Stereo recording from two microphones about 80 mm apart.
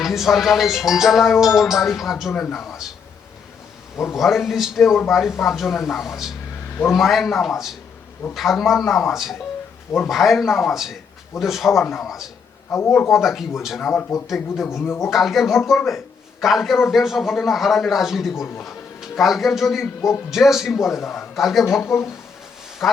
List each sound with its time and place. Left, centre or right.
0.0 s speech: centre
4.1 s speech: centre
12.7 s speech: left
13.1 s speech: centre
14.8 s speech: left
15.1 s a man's voice: centre
21.8 s speech: left
22.8 s speech: centre